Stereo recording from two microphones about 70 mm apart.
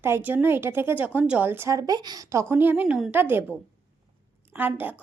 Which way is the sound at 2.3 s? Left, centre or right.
Right.